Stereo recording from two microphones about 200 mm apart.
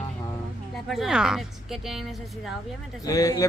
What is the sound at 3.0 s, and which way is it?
Speech, 15° left (ahead or behind).